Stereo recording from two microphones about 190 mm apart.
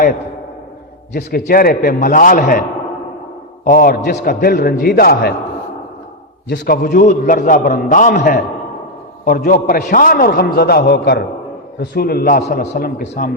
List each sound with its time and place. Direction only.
1.1 s a man's voice: 50° left (ahead or behind)
6.5 s a man's voice: 55° left (ahead or behind)